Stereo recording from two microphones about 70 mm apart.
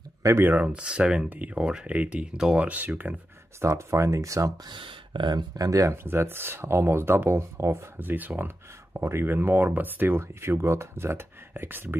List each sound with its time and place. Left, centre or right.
0.2 s speech: right
0.5 s speech: centre
3.6 s speech: right
5.2 s speech: right
6.0 s speech: right
8.0 s speech: right